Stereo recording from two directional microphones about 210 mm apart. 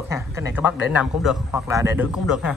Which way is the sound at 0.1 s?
15° right (ahead or behind).